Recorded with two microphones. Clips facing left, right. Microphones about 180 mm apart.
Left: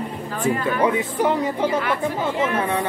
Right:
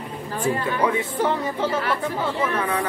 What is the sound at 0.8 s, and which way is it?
Speech, 15° left (ahead or behind).